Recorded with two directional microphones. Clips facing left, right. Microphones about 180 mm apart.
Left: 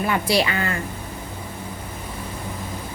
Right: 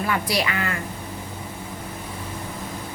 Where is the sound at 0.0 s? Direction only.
25° left (ahead or behind).